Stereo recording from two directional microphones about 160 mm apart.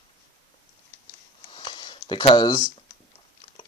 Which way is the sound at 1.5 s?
30° left (ahead or behind).